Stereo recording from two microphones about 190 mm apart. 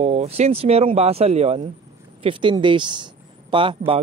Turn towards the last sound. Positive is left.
turn(degrees=-25)  # may be behind; listen again after turning